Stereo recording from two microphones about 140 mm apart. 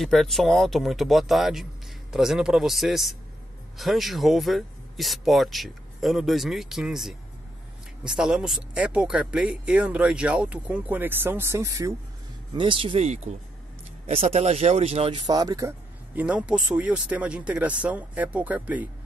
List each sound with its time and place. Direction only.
0.0 s speech: centre (ahead or behind); by 11.9 s 20° right (ahead or behind)
12.5 s speech: 35° right (ahead or behind)
16.2 s speech: 10° right (ahead or behind)